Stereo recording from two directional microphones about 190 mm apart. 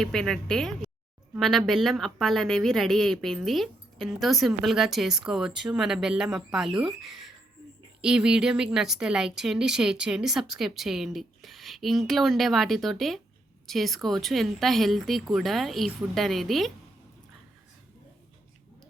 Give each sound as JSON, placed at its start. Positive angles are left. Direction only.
{"t": 0.0, "sound": "speech", "side_deg": 5}